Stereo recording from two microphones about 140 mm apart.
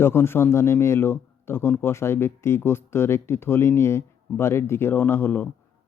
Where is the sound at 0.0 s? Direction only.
15° left (ahead or behind).